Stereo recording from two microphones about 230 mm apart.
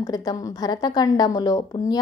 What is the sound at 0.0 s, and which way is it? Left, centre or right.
A woman's voice, centre.